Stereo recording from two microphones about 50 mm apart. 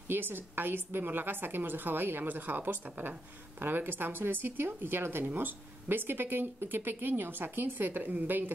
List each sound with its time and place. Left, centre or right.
0.1 s a woman's voice: right